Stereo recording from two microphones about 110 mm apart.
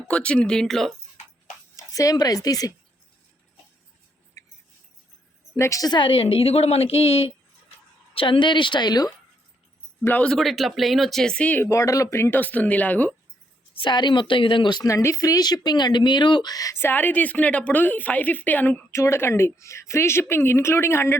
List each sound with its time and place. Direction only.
0.1 s speech: 10° left (ahead or behind)
1.7 s speech: 30° left (ahead or behind)
5.5 s a woman's voice: 30° left (ahead or behind); by 7.3 s 65° left (ahead or behind)
8.1 s speech: 50° left (ahead or behind)
10.0 s speech: 15° left (ahead or behind)
11.7 s speech: 30° left (ahead or behind)
13.7 s speech: 45° left (ahead or behind); by 18.8 s 15° left (ahead or behind)
18.9 s a woman's voice: 25° left (ahead or behind)